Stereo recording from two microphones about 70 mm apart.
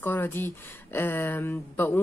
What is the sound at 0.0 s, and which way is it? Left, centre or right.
Speech, left.